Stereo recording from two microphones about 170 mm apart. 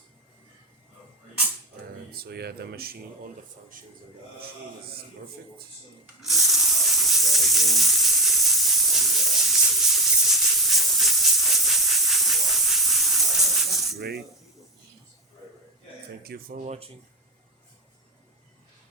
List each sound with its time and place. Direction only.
2.1 s speech: 65° right (ahead or behind)
6.2 s a sound: centre (ahead or behind)
16.2 s speech: 65° right (ahead or behind)
16.6 s speech: 40° right (ahead or behind)